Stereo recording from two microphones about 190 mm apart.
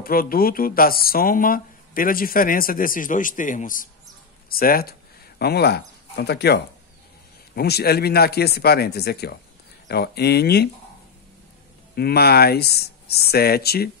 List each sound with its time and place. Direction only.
0.0 s speech: 50° left (ahead or behind)
11.9 s speech: 55° left (ahead or behind)